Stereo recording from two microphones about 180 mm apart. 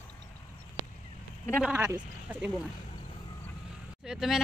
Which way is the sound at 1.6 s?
5° right (ahead or behind).